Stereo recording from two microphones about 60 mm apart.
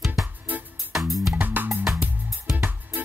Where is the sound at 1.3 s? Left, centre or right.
Right.